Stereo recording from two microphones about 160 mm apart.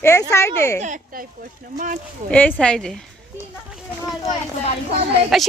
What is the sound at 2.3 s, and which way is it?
Speech, 10° left (ahead or behind).